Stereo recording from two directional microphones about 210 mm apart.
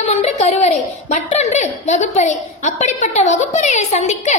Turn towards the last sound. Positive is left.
turn(degrees=35)  # may be behind; listen again after turning